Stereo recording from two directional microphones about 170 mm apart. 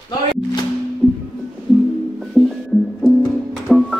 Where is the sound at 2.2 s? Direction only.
Centre (ahead or behind).